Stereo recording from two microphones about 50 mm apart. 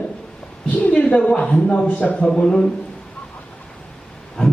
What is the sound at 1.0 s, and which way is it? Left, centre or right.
A man's voice, centre.